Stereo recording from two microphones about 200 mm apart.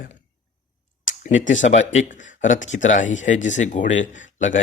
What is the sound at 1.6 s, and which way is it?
Speech, 40° left (ahead or behind).